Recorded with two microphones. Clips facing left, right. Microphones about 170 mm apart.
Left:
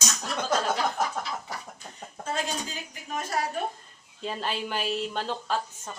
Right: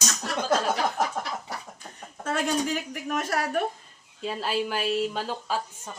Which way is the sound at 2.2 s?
70° right (ahead or behind).